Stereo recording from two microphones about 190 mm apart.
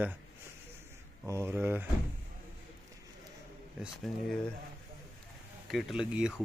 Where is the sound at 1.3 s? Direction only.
10° right (ahead or behind).